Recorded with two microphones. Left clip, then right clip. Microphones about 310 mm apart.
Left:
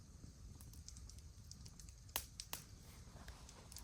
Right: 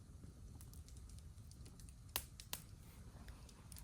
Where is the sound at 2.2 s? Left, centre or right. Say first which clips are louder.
Even; centre.